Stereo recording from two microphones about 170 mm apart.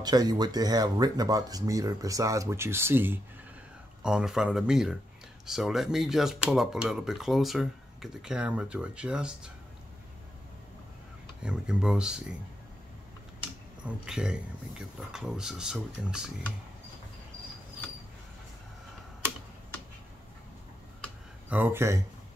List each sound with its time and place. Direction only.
0.0 s speech: 20° right (ahead or behind); by 9.5 s 5° right (ahead or behind)
11.4 s speech: 5° right (ahead or behind)
13.8 s speech: 5° right (ahead or behind)
21.5 s speech: 10° right (ahead or behind)